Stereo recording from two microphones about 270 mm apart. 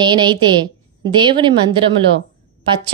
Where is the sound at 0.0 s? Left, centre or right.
Centre.